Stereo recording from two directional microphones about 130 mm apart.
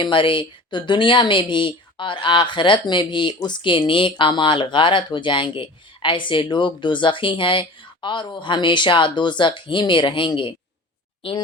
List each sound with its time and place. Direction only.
0.0 s speech: 40° left (ahead or behind)